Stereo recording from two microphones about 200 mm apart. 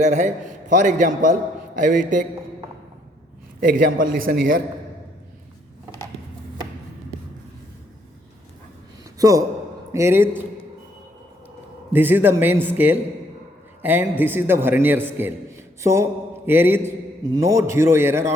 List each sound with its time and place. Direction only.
0.0 s a man's voice: 35° right (ahead or behind)
3.6 s a man's voice: 45° right (ahead or behind)
9.1 s a man's voice: 15° right (ahead or behind)
11.9 s a man's voice: 10° right (ahead or behind)